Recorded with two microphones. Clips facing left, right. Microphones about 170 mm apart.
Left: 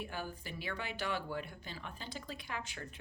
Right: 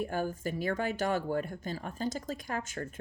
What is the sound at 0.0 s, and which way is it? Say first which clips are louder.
Speech: right 10 dB; 45° right (ahead or behind).